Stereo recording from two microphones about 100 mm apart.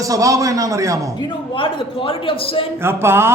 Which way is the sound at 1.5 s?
60° left (ahead or behind).